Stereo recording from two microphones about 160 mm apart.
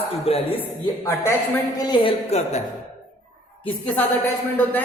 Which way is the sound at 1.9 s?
40° left (ahead or behind).